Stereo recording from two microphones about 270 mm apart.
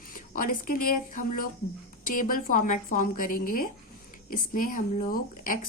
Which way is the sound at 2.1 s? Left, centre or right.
Left.